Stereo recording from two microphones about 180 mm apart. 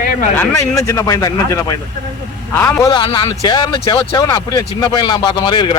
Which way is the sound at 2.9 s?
25° left (ahead or behind).